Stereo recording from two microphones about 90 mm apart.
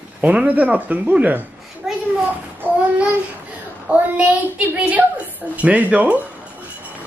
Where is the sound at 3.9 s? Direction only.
15° right (ahead or behind).